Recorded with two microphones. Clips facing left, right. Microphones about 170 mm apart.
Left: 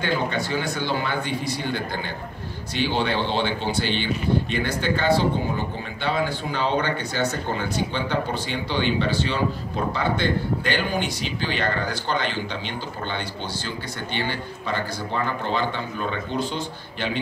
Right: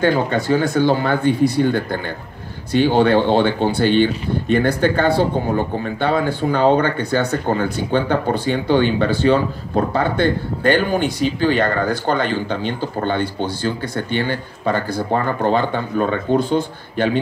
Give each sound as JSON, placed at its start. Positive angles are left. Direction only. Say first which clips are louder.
{"t": 0.0, "sound": "speech", "louder": "right 8 dB", "side_deg": -50}